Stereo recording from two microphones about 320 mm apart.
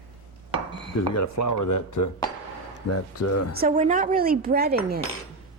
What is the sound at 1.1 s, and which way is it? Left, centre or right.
Speech, left.